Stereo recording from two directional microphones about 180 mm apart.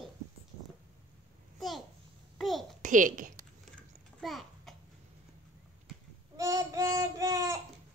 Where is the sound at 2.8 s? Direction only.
45° right (ahead or behind).